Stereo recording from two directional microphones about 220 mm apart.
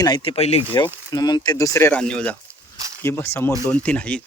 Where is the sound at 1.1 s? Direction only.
20° left (ahead or behind).